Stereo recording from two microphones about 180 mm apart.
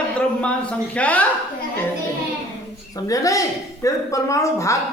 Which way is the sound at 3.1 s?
20° left (ahead or behind).